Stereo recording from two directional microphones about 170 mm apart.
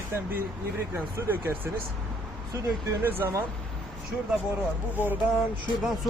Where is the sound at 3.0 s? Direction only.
15° right (ahead or behind).